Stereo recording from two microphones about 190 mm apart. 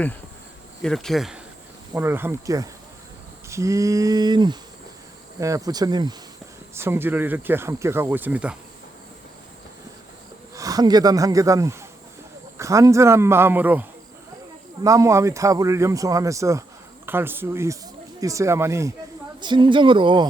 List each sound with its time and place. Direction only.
0.8 s speech: 5° left (ahead or behind)
1.9 s speech: 10° right (ahead or behind)
10.5 s speech: 20° right (ahead or behind)
14.8 s speech: 15° right (ahead or behind)